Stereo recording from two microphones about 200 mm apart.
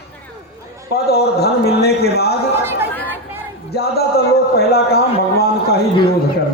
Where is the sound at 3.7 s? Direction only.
50° left (ahead or behind).